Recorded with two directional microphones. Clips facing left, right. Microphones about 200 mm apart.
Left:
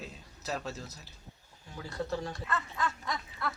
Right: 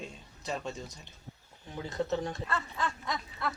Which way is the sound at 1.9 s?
20° right (ahead or behind).